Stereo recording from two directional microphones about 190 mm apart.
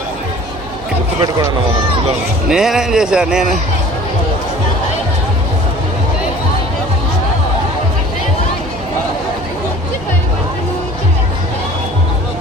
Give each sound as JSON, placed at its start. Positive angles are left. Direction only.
{"t": 1.2, "sound": "speech", "side_deg": -15}
{"t": 2.5, "sound": "a man's voice", "side_deg": -5}